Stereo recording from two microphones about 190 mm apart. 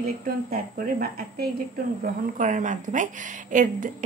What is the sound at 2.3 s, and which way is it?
Speech, 40° right (ahead or behind).